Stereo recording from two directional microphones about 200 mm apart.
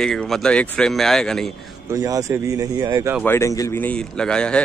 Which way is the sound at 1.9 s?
15° right (ahead or behind).